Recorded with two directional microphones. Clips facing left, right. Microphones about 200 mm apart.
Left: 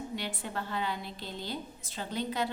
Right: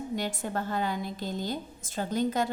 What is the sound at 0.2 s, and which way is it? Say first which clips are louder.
A woman's voice: right 5 dB; 45° right (ahead or behind).